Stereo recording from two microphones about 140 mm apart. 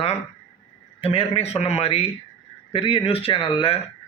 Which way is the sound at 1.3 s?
50° left (ahead or behind).